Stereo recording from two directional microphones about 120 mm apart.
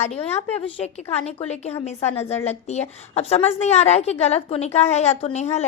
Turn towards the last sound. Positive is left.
turn(degrees=65)  # may be behind; listen again after turning